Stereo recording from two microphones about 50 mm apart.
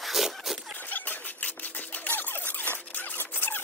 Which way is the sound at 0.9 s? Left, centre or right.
Left.